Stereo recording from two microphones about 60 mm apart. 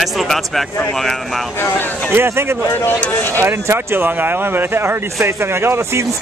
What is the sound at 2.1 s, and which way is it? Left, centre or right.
Speech, right.